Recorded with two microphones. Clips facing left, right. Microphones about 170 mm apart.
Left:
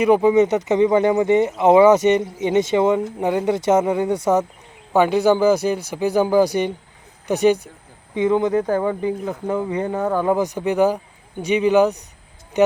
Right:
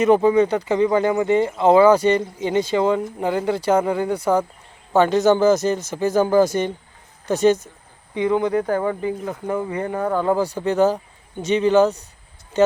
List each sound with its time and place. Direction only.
0.0 s speech: 15° left (ahead or behind)
4.9 s speech: 10° left (ahead or behind)
8.6 s speech: 10° left (ahead or behind)